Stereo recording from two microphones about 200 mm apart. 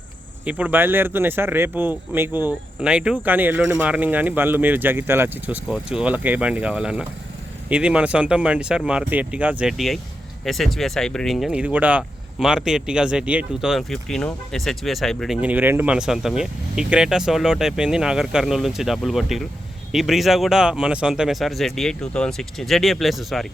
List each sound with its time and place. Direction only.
0.4 s speech: 5° right (ahead or behind)